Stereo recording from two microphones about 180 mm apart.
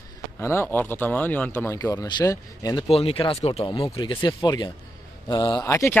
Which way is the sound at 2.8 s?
30° left (ahead or behind).